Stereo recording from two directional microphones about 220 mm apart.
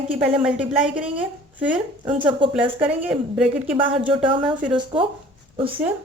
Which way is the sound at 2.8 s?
5° right (ahead or behind).